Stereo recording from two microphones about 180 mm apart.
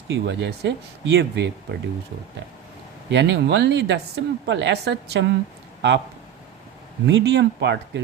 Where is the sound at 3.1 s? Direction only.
80° right.